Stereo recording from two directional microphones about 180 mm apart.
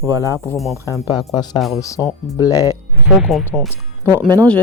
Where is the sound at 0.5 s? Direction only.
Centre (ahead or behind).